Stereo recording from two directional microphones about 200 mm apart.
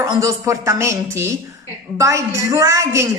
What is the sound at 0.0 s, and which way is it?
A woman's voice, 15° right (ahead or behind).